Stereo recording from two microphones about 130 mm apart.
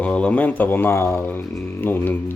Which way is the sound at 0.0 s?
10° left (ahead or behind).